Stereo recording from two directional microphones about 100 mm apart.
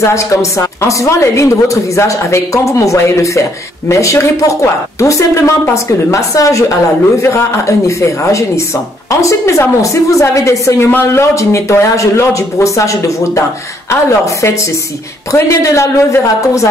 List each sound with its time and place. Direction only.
0.0 s a woman's voice: 30° left (ahead or behind)